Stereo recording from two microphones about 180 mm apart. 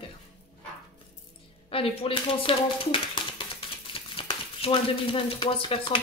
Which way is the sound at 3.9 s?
30° left (ahead or behind).